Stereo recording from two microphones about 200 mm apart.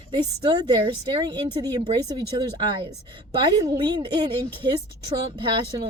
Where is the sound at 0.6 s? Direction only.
20° right (ahead or behind).